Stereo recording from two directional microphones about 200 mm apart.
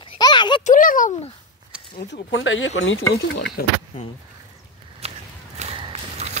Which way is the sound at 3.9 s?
40° left (ahead or behind).